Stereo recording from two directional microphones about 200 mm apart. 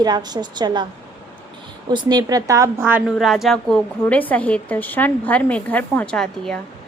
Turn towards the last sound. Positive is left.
turn(degrees=5)  # may be behind; listen again after turning